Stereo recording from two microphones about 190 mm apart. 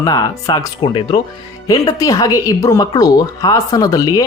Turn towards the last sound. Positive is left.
turn(degrees=20)  # may be behind; listen again after turning